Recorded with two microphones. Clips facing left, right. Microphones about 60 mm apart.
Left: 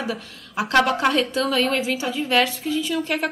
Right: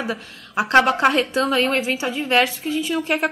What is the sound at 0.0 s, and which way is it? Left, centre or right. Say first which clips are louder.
A woman's voice: right 1 dB; right.